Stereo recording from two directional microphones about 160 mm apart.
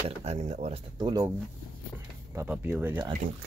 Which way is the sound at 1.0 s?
30° right (ahead or behind).